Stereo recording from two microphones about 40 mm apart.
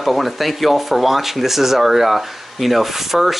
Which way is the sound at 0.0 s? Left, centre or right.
Centre.